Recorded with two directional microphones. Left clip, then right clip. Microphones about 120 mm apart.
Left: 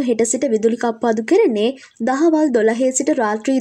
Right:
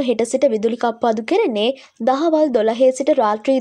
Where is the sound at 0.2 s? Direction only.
45° right (ahead or behind).